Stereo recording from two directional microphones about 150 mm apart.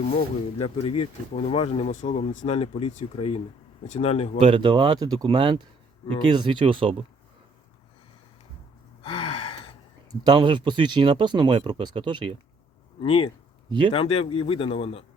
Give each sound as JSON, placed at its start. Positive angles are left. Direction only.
{"t": 0.6, "sound": "speech", "side_deg": 40}
{"t": 4.4, "sound": "speech", "side_deg": -35}
{"t": 9.0, "sound": "gasp", "side_deg": 40}
{"t": 10.2, "sound": "speech", "side_deg": -30}
{"t": 13.0, "sound": "a man's voice", "side_deg": 35}
{"t": 13.7, "sound": "speech", "side_deg": -30}
{"t": 13.9, "sound": "a man's voice", "side_deg": 40}